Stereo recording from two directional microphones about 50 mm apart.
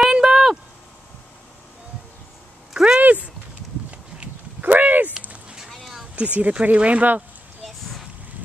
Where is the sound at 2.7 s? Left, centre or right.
Centre.